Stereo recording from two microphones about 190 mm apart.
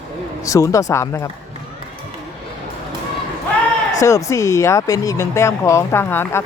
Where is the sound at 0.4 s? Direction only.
15° left (ahead or behind).